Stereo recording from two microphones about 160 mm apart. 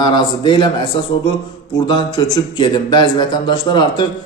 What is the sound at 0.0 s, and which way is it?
Speech, 30° left (ahead or behind).